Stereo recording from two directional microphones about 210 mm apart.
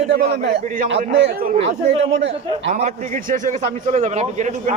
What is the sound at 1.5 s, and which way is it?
A man's voice, 30° right (ahead or behind).